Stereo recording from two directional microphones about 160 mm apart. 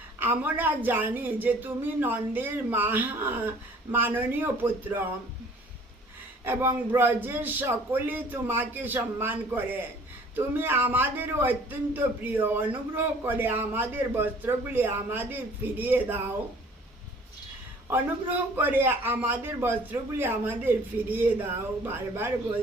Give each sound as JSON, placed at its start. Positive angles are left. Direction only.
{"t": 0.2, "sound": "a man's voice", "side_deg": -10}
{"t": 6.4, "sound": "a man's voice", "side_deg": -15}
{"t": 17.8, "sound": "a man's voice", "side_deg": -10}